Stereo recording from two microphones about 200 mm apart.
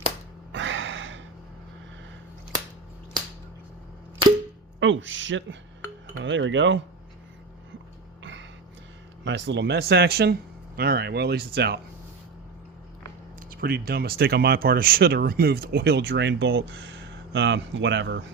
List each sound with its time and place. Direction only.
0.5 s gasp: 70° right (ahead or behind)
4.8 s speech: 70° right (ahead or behind)
8.2 s a sound: 65° right (ahead or behind)
9.2 s speech: 65° right (ahead or behind)
13.5 s speech: 50° right (ahead or behind); by 18.2 s 65° right (ahead or behind)